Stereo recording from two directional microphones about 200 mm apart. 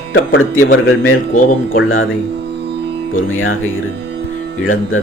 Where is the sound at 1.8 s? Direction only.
90° left.